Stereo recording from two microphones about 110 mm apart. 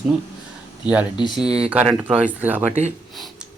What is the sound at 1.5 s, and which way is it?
Speech, 65° right (ahead or behind).